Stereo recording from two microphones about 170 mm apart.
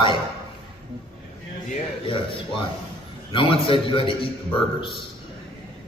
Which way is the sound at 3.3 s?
30° left (ahead or behind).